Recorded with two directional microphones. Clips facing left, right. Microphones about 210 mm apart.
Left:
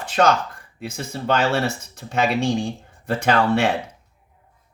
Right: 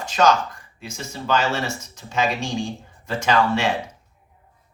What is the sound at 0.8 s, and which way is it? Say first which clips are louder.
Speech: left 4 dB; 60° left (ahead or behind).